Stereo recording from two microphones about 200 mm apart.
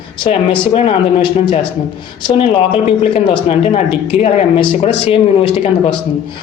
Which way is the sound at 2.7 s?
25° left (ahead or behind).